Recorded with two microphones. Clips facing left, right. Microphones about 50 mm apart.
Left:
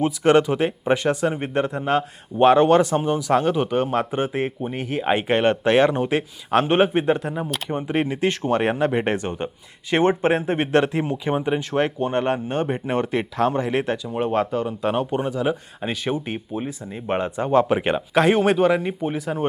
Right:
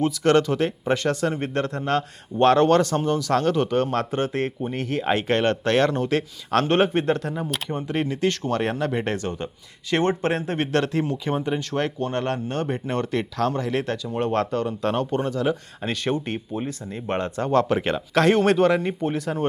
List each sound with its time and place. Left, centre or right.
0.0 s speech: centre